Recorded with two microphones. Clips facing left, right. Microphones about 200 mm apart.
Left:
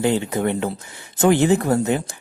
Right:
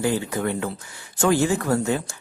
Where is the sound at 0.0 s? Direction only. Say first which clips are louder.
Left 4 dB; 20° left (ahead or behind).